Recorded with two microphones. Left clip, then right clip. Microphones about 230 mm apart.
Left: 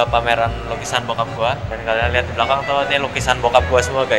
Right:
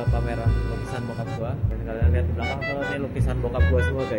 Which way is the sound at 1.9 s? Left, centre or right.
Centre.